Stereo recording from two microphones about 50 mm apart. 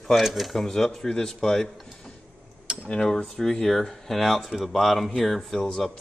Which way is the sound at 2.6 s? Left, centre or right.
Right.